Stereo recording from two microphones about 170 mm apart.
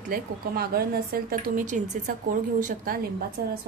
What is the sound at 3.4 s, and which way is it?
Speech, 70° right (ahead or behind).